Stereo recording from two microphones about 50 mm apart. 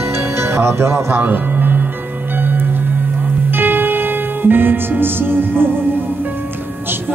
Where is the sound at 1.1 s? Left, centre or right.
Right.